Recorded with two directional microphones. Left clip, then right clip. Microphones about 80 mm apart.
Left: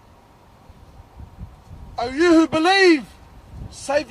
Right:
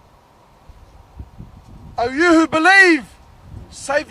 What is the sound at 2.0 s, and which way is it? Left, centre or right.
A man's voice, right.